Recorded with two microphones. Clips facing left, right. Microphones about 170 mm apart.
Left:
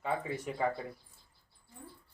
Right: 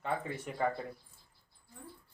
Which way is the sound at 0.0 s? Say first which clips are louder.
Left 2 dB; 5° left (ahead or behind).